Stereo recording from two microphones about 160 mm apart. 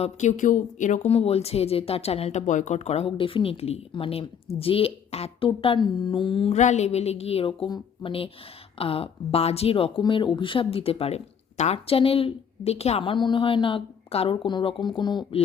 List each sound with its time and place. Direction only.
0.0 s speech: 50° left (ahead or behind)
6.6 s speech: 45° left (ahead or behind); by 15.4 s 30° left (ahead or behind)